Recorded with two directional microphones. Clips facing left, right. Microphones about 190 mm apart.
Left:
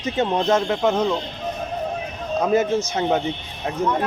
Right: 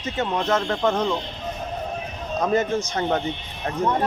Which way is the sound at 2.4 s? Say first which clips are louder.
Left 2 dB; 5° left (ahead or behind).